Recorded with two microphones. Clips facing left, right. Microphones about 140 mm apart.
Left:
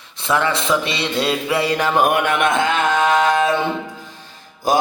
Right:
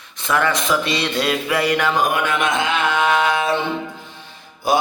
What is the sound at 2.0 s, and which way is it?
Mantra, 60° left (ahead or behind).